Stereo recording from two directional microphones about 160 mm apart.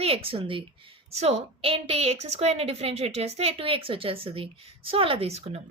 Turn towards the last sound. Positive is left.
turn(degrees=-40)  # may be behind; listen again after turning